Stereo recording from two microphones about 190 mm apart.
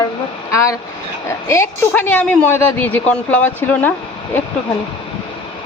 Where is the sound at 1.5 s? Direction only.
15° left (ahead or behind).